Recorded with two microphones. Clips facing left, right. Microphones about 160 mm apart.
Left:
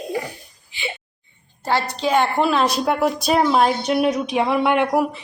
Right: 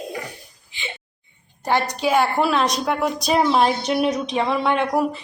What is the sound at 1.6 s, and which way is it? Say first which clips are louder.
A woman's voice: even; 15° right (ahead or behind).